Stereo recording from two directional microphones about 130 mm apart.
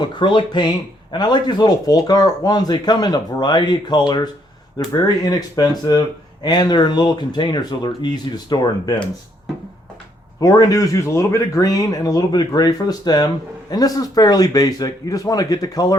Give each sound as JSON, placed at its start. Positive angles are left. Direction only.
{"t": 0.0, "sound": "speech", "side_deg": 35}
{"t": 10.4, "sound": "speech", "side_deg": 30}